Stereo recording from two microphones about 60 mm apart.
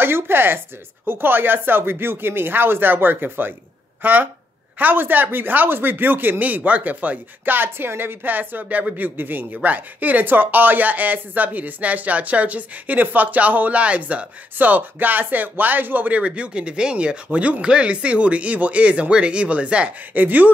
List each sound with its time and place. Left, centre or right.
0.0 s speech: right